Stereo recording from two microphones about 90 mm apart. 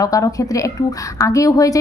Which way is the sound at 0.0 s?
40° left (ahead or behind).